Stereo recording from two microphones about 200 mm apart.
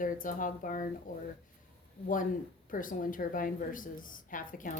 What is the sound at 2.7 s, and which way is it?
A woman's voice, 45° left (ahead or behind).